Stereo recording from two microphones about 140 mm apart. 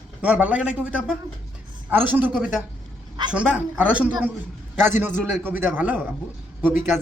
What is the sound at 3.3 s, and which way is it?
Speech, 5° right (ahead or behind).